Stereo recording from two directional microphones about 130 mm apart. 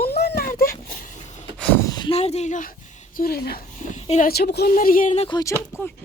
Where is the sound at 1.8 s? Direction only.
35° left (ahead or behind).